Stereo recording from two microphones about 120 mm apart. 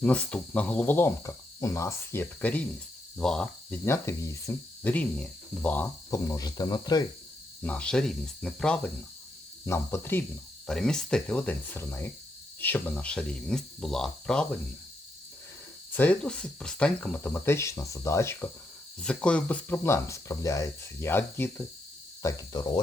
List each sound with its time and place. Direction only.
0.0 s speech: 10° left (ahead or behind)
3.8 s speech: 25° left (ahead or behind)
4.9 s speech: 10° left (ahead or behind)
6.1 s speech: 25° left (ahead or behind)
7.6 s speech: 10° left (ahead or behind)
9.6 s speech: 20° left (ahead or behind)
10.7 s speech: 5° left (ahead or behind)
15.9 s speech: 15° left (ahead or behind)
18.9 s speech: 10° left (ahead or behind); by 22.8 s 35° left (ahead or behind)